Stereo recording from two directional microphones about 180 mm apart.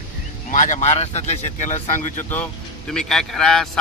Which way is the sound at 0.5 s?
45° left (ahead or behind).